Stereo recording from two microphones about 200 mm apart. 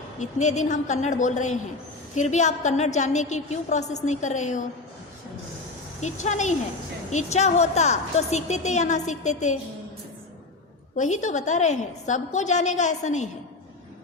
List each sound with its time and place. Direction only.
0.2 s a woman's voice: 35° left (ahead or behind)
6.0 s a woman's voice: 35° left (ahead or behind)
10.9 s a woman's voice: 35° left (ahead or behind)